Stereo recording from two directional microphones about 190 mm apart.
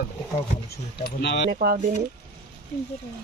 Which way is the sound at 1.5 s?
50° right (ahead or behind).